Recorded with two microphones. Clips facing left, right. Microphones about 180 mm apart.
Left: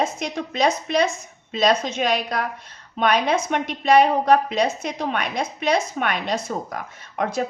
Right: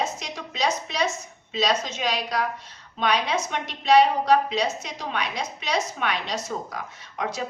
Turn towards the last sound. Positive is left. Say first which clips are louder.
# left 6 dB
turn(degrees=50)  # may be behind; listen again after turning